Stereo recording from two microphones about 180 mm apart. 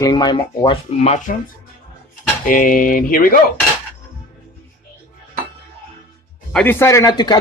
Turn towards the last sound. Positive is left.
turn(degrees=20)  # may be behind; listen again after turning